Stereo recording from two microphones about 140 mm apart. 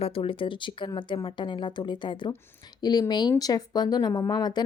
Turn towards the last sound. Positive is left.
turn(degrees=30)  # may be behind; listen again after turning